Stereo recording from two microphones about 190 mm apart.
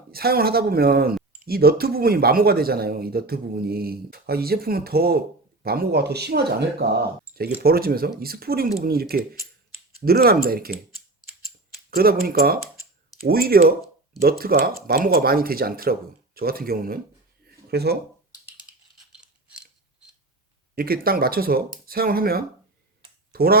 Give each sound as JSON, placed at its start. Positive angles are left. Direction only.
{"t": 0.1, "sound": "a man's voice", "side_deg": -55}
{"t": 11.9, "sound": "a man's voice", "side_deg": -50}
{"t": 17.4, "sound": "a sound", "side_deg": -55}
{"t": 20.7, "sound": "a man's voice", "side_deg": -50}